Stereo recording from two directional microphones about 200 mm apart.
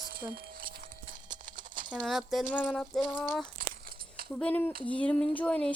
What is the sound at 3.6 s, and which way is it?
Crumpling, 45° right (ahead or behind).